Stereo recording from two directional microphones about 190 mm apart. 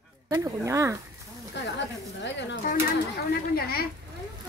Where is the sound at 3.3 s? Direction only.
55° left (ahead or behind).